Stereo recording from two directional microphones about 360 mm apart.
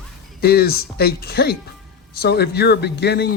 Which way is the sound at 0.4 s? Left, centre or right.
Left.